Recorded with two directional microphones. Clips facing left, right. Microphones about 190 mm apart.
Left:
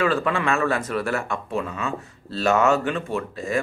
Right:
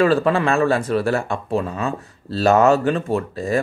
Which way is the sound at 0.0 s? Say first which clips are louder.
Right 6 dB; 35° right (ahead or behind).